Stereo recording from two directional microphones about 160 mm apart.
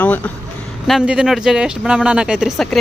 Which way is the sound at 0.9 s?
5° right (ahead or behind).